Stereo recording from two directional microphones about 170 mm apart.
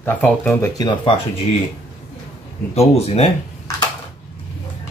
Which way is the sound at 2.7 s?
35° left (ahead or behind).